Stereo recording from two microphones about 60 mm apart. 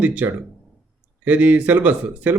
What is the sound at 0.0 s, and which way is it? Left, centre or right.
Speech, right.